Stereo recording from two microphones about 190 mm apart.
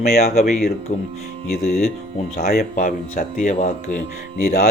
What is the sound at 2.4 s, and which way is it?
Speech, 50° left (ahead or behind).